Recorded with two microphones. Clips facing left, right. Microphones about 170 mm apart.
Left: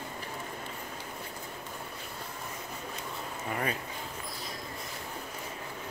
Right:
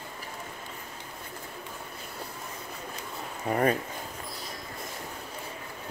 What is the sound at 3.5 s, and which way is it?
Speech, 40° right (ahead or behind).